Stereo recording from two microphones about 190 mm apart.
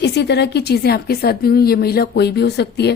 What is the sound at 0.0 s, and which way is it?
Speech, 60° left (ahead or behind).